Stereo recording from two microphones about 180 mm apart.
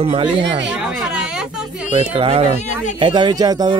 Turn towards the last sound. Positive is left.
turn(degrees=-20)  # may be behind; listen again after turning